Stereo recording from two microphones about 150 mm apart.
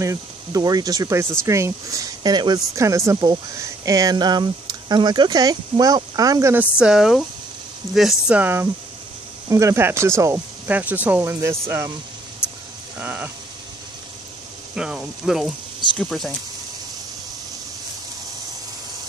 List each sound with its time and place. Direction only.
0.0 s speech: 25° right (ahead or behind)
6.5 s speech: 10° right (ahead or behind)
13.0 s speech: 10° right (ahead or behind)
14.8 s speech: 5° right (ahead or behind)